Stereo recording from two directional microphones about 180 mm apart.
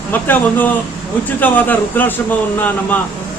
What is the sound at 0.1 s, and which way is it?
Speech, 10° left (ahead or behind).